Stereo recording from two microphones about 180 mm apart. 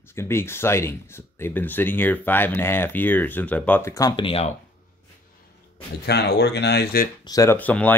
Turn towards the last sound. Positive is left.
turn(degrees=10)  # may be behind; listen again after turning